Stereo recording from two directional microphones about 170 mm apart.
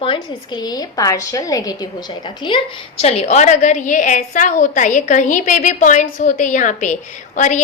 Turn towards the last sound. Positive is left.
turn(degrees=45)  # may be behind; listen again after turning